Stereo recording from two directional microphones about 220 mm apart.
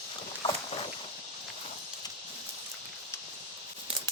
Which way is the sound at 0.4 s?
25° left (ahead or behind).